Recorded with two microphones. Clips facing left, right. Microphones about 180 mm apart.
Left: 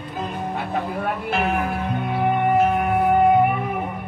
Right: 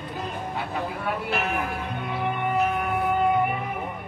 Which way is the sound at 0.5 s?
55° left (ahead or behind).